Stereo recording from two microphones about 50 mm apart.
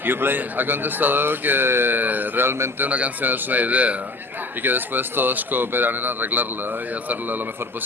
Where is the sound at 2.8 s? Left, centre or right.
Right.